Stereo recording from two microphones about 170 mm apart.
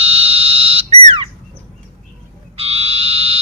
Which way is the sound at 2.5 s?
35° right (ahead or behind).